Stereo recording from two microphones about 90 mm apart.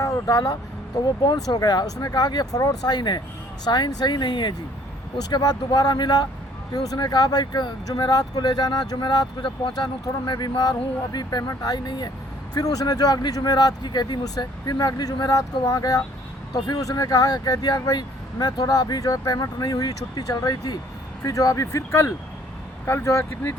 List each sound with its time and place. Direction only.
0.0 s vehicle: 40° left (ahead or behind)
1.0 s speech: 50° left (ahead or behind)
5.3 s speech: 45° left (ahead or behind); by 23.6 s 25° left (ahead or behind)